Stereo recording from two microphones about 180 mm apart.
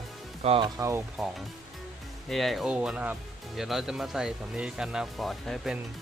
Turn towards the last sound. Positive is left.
turn(degrees=0)  # may be behind; listen again after turning